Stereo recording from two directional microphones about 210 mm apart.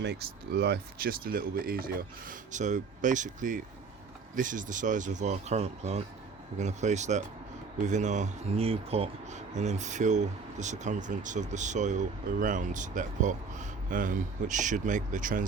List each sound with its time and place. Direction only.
0.0 s speech: 55° right (ahead or behind)